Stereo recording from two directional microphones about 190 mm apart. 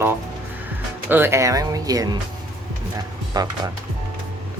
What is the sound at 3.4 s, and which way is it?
Speech, 20° right (ahead or behind).